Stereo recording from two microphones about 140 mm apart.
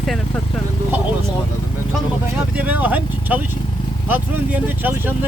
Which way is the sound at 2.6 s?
10° right (ahead or behind).